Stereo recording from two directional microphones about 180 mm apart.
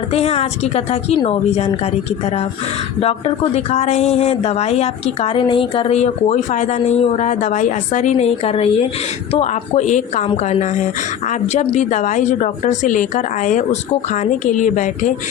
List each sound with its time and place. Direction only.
0.1 s a woman's voice: 35° left (ahead or behind)
3.0 s a woman's voice: 35° left (ahead or behind)